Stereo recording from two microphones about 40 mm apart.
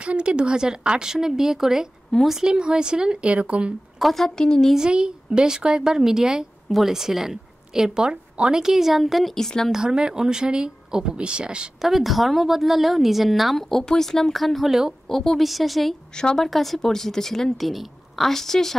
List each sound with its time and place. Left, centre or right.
0.0 s a woman's voice: right
4.0 s a woman's voice: centre
4.4 s speech: centre
4.7 s a woman's voice: right; by 9.3 s centre
9.3 s speech: centre
9.7 s speech: centre
11.8 s a woman's voice: centre
14.7 s a woman's voice: centre
15.0 s a woman's voice: centre